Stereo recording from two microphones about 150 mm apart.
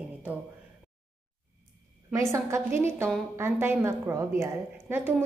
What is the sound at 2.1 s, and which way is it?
A woman's voice, 20° right (ahead or behind).